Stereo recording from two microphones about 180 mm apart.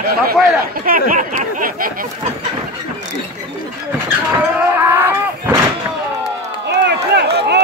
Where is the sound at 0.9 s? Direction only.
50° right (ahead or behind).